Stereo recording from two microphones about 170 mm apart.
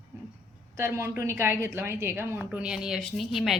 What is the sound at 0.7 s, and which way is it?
A woman's voice, 15° right (ahead or behind).